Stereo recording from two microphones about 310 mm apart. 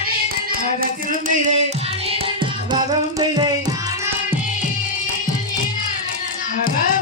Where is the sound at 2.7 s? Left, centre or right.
Centre.